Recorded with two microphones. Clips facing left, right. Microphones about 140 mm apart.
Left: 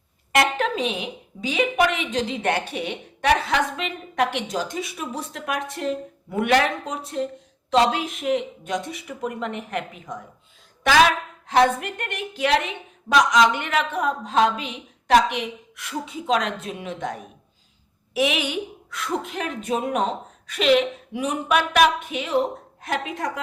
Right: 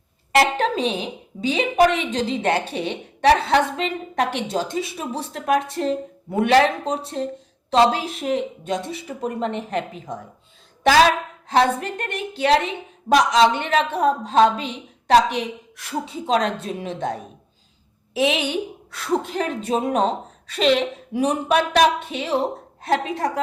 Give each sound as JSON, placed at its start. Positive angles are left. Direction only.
{"t": 0.3, "sound": "a woman's voice", "side_deg": -30}
{"t": 11.4, "sound": "a woman's voice", "side_deg": -35}